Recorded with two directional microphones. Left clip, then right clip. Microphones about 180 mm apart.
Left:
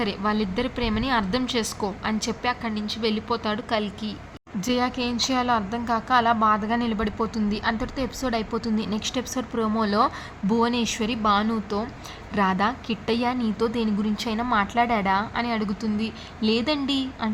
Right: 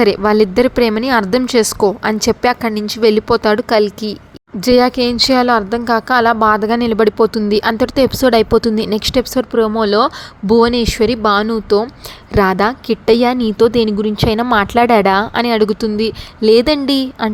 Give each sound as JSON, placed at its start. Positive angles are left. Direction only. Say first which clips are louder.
{"t": 0.0, "sound": "a woman's voice", "louder": "right 15 dB", "side_deg": -45}